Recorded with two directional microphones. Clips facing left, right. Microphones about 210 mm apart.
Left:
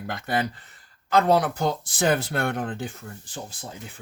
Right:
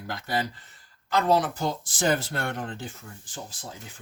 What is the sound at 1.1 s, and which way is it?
Speech, 60° left (ahead or behind).